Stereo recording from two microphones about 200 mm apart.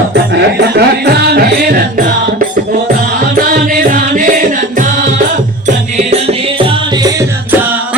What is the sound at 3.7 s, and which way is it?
Music, 45° right (ahead or behind).